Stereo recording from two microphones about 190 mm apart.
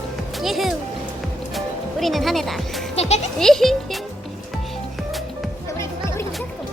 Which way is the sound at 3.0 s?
35° left (ahead or behind).